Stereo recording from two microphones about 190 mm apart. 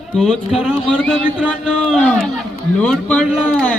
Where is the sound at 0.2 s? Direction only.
Centre (ahead or behind).